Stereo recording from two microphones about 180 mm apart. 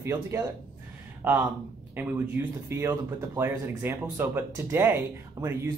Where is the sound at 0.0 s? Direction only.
15° right (ahead or behind).